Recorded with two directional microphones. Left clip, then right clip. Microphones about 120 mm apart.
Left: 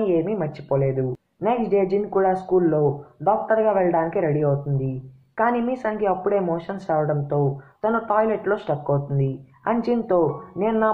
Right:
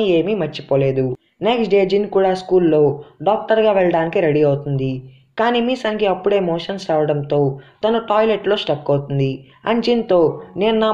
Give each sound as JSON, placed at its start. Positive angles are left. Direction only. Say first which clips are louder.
{"t": 0.0, "sound": "speech", "louder": "right 5 dB", "side_deg": -50}